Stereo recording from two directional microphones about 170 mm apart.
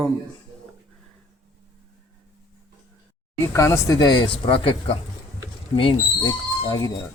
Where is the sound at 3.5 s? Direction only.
20° left (ahead or behind).